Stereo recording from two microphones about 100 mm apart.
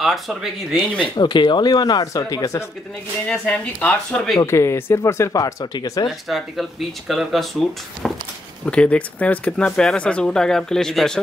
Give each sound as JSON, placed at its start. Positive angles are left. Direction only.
{"t": 0.0, "sound": "speech", "side_deg": 0}
{"t": 1.1, "sound": "speech", "side_deg": 50}
{"t": 3.3, "sound": "speech", "side_deg": 15}
{"t": 4.4, "sound": "speech", "side_deg": 25}
{"t": 6.0, "sound": "speech", "side_deg": 0}
{"t": 8.0, "sound": "a sound", "side_deg": 0}
{"t": 8.6, "sound": "speech", "side_deg": 10}